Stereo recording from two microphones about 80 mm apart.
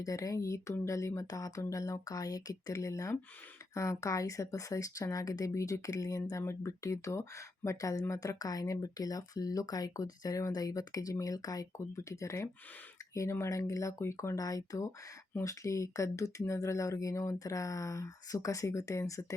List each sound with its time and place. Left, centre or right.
0.0 s speech: left
14.3 s speech: left